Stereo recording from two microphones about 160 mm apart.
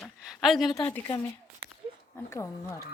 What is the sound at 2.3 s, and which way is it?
Speech, 15° left (ahead or behind).